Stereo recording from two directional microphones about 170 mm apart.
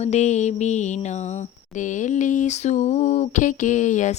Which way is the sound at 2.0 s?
45° left (ahead or behind).